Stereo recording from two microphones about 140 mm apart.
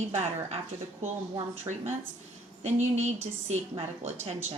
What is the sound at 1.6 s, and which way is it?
A woman's voice, 55° right (ahead or behind).